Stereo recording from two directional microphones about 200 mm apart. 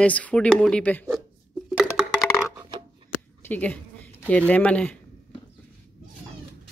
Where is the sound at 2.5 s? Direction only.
20° right (ahead or behind).